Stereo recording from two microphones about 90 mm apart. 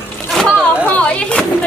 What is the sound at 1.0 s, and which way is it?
Speech, 15° left (ahead or behind).